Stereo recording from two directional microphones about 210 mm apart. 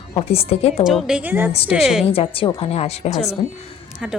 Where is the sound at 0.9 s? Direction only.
5° right (ahead or behind).